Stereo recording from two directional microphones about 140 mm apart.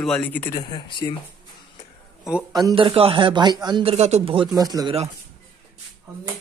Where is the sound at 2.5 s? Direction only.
30° right (ahead or behind); by 4.4 s 45° right (ahead or behind).